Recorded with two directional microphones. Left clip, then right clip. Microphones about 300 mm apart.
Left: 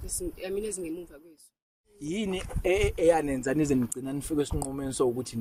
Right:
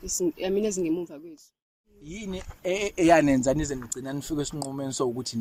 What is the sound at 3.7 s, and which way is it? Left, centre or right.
Speech, centre.